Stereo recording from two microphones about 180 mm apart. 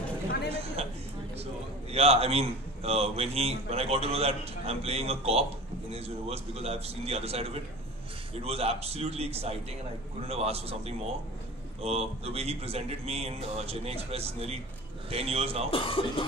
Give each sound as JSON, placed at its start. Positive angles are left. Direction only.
{"t": 0.5, "sound": "a sound", "side_deg": -35}
{"t": 1.4, "sound": "a man's voice", "side_deg": -35}
{"t": 15.7, "sound": "speech", "side_deg": 30}